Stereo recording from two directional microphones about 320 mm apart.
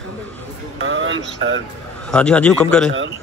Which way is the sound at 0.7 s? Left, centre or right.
Right.